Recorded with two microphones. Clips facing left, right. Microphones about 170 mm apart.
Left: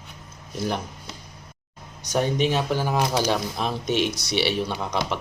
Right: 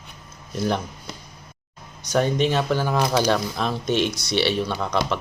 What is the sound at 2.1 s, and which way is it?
Speech, 15° left (ahead or behind).